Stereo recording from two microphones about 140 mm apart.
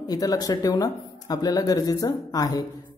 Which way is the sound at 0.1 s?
25° left (ahead or behind).